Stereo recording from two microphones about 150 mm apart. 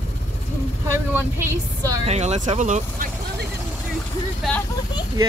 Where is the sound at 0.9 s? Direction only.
15° right (ahead or behind).